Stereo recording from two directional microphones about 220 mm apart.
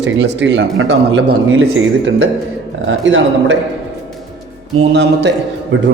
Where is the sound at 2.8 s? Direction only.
55° right (ahead or behind).